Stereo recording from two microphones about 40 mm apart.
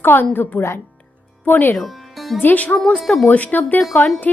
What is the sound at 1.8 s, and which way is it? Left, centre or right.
Music, centre.